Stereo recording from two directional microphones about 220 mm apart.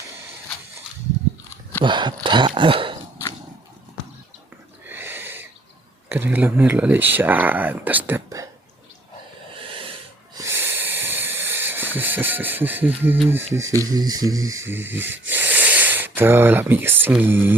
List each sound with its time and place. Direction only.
1.8 s dog: 20° right (ahead or behind)
4.9 s owl: 10° right (ahead or behind)
6.1 s speech: 10° right (ahead or behind)
9.6 s snort: 25° right (ahead or behind)
10.3 s hiss: 10° right (ahead or behind)
13.2 s speech: 10° right (ahead or behind)
15.3 s a sound: 10° right (ahead or behind)